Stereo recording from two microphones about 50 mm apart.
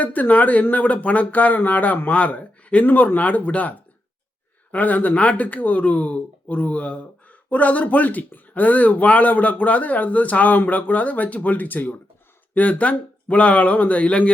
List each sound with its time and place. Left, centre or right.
0.0 s speech: left